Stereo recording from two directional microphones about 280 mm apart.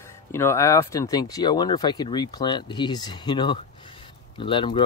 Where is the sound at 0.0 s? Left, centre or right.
Centre.